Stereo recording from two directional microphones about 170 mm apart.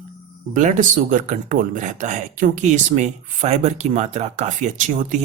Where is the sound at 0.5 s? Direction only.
50° right (ahead or behind).